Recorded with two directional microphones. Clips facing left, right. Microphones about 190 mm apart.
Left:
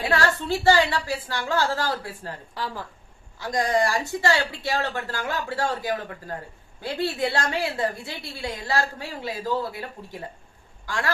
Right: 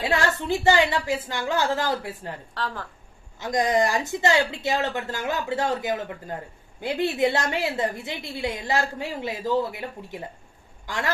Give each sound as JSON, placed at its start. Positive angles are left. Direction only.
{"t": 0.0, "sound": "a woman's voice", "side_deg": -20}
{"t": 2.6, "sound": "speech", "side_deg": 10}
{"t": 3.3, "sound": "a woman's voice", "side_deg": -20}